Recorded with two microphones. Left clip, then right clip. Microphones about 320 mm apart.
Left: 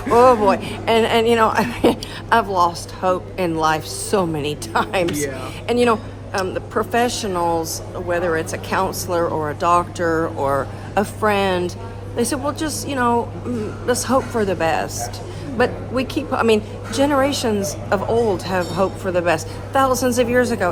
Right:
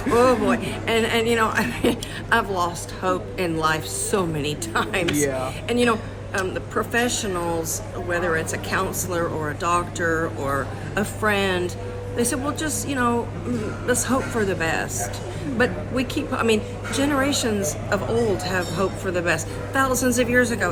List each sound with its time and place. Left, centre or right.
0.2 s a man's voice: centre
5.1 s speech: centre
5.6 s speech: centre